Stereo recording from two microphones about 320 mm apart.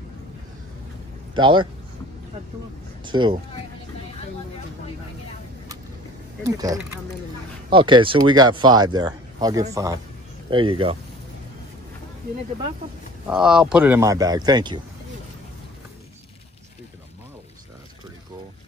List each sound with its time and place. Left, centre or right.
1.3 s speech: centre
3.1 s speech: centre
6.4 s speech: centre
13.3 s speech: centre